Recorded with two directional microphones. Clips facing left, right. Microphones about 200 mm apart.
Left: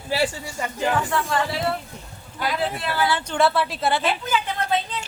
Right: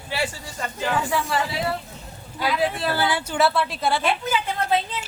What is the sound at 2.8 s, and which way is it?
Speech, 35° right (ahead or behind).